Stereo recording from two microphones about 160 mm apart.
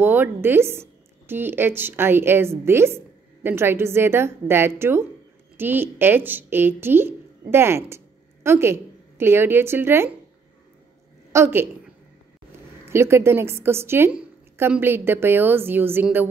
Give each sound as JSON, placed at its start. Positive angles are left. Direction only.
{"t": 0.0, "sound": "a woman's voice", "side_deg": -15}
{"t": 11.3, "sound": "a woman's voice", "side_deg": -15}
{"t": 12.8, "sound": "a woman's voice", "side_deg": -15}